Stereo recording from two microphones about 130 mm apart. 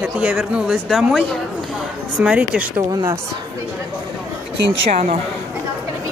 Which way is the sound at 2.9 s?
25° right (ahead or behind).